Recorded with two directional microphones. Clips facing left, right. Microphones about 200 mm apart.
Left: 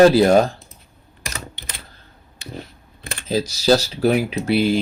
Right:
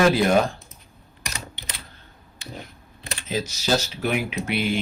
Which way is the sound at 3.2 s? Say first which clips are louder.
Left 8 dB; 35° left (ahead or behind).